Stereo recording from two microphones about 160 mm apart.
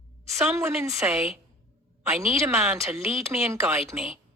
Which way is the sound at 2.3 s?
15° right (ahead or behind).